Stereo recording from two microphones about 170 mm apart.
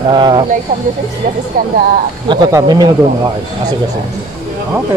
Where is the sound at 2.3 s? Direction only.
25° right (ahead or behind).